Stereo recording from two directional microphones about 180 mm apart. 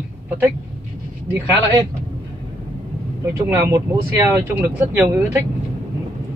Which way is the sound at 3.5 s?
15° right (ahead or behind).